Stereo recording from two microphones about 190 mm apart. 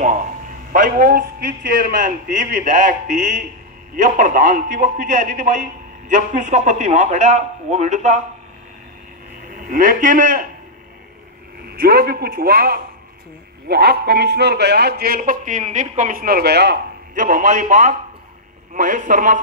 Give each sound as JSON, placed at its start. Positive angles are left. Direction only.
{"t": 0.7, "sound": "a man's voice", "side_deg": -45}
{"t": 9.6, "sound": "a man's voice", "side_deg": -45}
{"t": 11.8, "sound": "a man's voice", "side_deg": -55}
{"t": 17.2, "sound": "a man's voice", "side_deg": -40}